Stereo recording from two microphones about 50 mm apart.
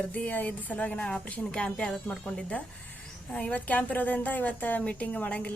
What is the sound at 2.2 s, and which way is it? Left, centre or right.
A woman's voice, left.